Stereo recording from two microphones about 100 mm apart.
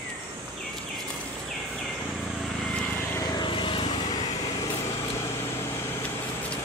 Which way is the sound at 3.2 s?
55° left (ahead or behind).